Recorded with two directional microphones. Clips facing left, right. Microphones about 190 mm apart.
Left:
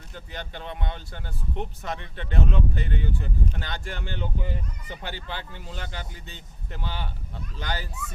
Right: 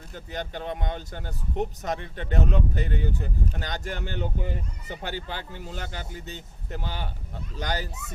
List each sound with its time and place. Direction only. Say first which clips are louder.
0.1 s speech: right 4 dB; 45° right (ahead or behind)